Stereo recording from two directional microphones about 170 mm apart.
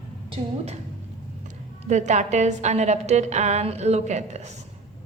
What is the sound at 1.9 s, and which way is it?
A woman's voice, 45° right (ahead or behind).